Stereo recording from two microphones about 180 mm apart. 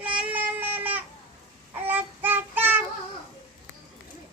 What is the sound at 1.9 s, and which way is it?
Child singing, 10° right (ahead or behind).